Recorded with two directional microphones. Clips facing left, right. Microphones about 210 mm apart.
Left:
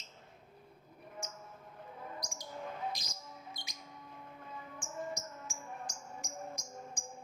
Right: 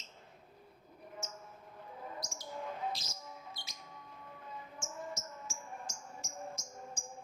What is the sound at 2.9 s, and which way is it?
Music, 15° left (ahead or behind).